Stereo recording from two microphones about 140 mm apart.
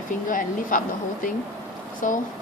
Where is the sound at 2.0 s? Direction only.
65° left (ahead or behind).